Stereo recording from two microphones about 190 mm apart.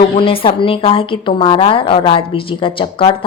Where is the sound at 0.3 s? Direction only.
25° left (ahead or behind).